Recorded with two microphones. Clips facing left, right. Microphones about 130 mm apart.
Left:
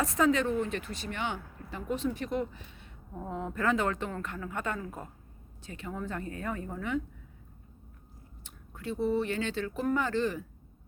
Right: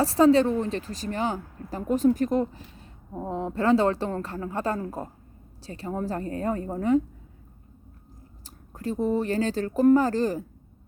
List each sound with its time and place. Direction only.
0.0 s speech: 35° right (ahead or behind)
8.4 s speech: 40° right (ahead or behind)